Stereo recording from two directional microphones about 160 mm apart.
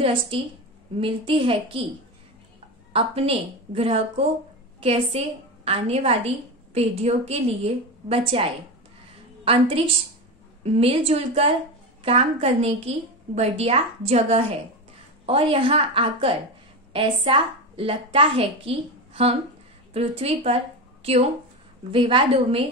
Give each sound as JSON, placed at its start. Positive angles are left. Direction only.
{"t": 0.0, "sound": "a woman's voice", "side_deg": -35}
{"t": 2.9, "sound": "a woman's voice", "side_deg": -35}